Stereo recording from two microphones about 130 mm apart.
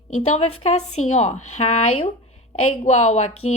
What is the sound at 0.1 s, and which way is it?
A woman's voice, 55° left (ahead or behind).